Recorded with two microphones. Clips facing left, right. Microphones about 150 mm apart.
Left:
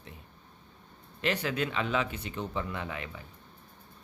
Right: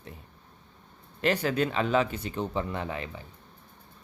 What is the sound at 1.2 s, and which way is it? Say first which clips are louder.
Speech: right 5 dB; 40° right (ahead or behind).